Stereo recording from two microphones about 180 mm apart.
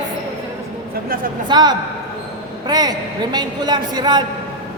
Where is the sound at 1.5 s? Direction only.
25° right (ahead or behind).